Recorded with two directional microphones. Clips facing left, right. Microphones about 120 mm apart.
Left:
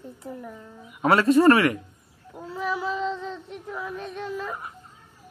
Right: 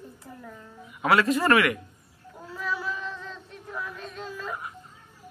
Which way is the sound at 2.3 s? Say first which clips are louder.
Left 4 dB; 20° left (ahead or behind).